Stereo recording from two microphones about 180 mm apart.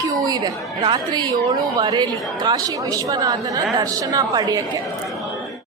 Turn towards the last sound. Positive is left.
turn(degrees=-20)  # may be behind; listen again after turning